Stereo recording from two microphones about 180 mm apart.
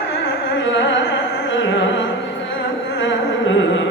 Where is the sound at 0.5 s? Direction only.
90° left.